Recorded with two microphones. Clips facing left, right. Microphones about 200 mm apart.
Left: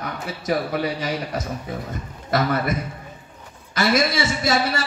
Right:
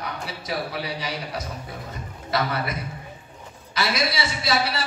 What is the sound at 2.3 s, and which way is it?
A man's voice, 50° left (ahead or behind).